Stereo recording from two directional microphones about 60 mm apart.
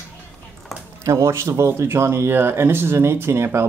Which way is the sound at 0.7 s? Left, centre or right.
Centre.